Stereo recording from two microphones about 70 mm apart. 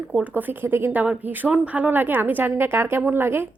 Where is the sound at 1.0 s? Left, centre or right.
Centre; by 3.5 s right.